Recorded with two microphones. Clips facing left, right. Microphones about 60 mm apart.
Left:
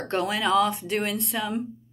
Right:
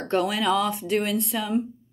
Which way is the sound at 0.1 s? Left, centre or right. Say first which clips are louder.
Right 1 dB; left.